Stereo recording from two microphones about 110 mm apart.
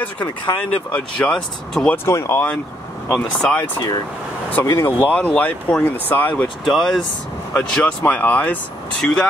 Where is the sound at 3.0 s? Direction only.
5° left (ahead or behind).